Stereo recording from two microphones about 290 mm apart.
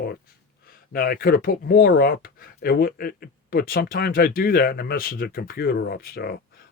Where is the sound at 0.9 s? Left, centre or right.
Left.